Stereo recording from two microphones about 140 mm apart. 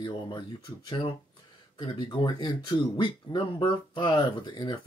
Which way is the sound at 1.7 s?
35° left (ahead or behind).